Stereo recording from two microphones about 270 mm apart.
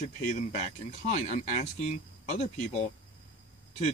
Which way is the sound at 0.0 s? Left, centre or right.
Left.